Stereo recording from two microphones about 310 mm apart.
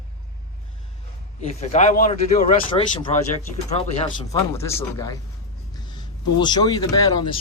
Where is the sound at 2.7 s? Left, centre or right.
Centre.